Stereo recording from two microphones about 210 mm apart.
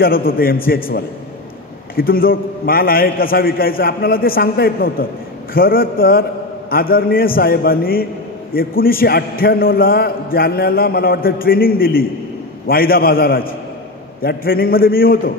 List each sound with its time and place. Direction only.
0.0 s a man's voice: 45° left (ahead or behind)